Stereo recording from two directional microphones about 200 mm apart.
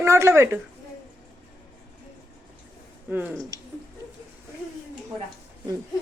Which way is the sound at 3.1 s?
10° right (ahead or behind).